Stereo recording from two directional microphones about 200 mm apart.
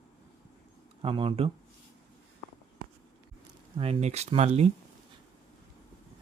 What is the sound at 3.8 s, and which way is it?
Speech, 30° right (ahead or behind).